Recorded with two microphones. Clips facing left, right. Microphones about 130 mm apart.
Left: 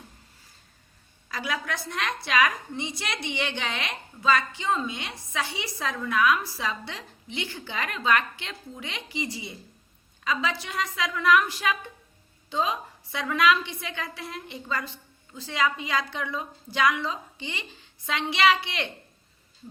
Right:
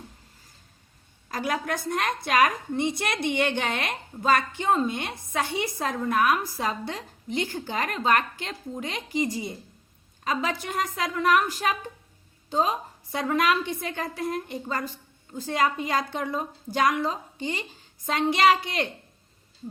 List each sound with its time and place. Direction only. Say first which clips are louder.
1.3 s a woman's voice: right 3 dB; 45° right (ahead or behind)